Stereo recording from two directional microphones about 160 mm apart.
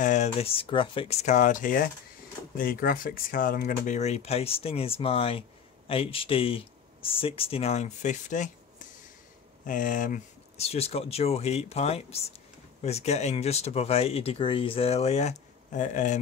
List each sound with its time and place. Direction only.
0.0 s speech: 45° left (ahead or behind)
10.6 s speech: 40° left (ahead or behind)